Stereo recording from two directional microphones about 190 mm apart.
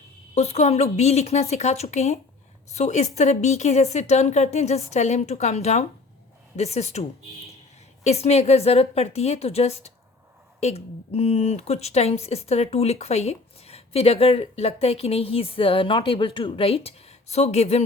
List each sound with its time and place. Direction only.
0.3 s a woman's voice: 35° left (ahead or behind)
8.0 s a woman's voice: 35° left (ahead or behind)